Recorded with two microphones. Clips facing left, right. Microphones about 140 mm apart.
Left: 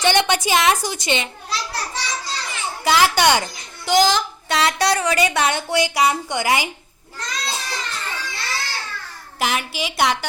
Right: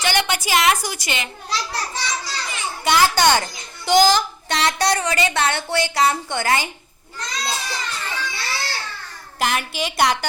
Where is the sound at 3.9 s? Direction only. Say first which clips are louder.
Right 2 dB; centre (ahead or behind).